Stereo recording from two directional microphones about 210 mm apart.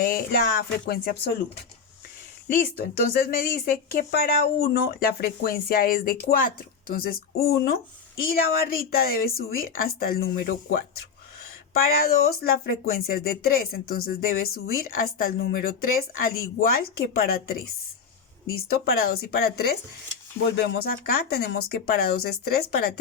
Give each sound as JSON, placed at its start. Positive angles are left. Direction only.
{"t": 0.0, "sound": "speech", "side_deg": 45}
{"t": 2.5, "sound": "speech", "side_deg": 45}
{"t": 11.8, "sound": "speech", "side_deg": 45}
{"t": 20.7, "sound": "speech", "side_deg": 45}